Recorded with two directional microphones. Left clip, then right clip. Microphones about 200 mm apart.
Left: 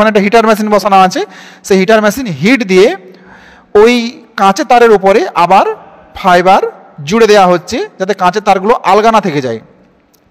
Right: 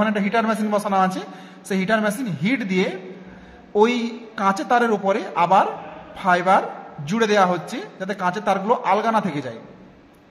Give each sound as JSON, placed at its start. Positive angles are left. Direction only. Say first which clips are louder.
{"t": 0.0, "sound": "a man's voice", "louder": "left 14 dB", "side_deg": 50}